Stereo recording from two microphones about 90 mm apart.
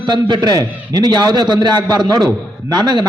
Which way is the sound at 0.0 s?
60° right (ahead or behind).